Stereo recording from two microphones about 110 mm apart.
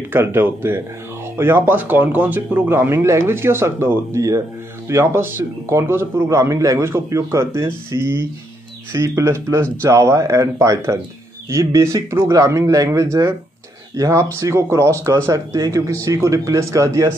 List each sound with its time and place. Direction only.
0.1 s a man's voice: 20° right (ahead or behind)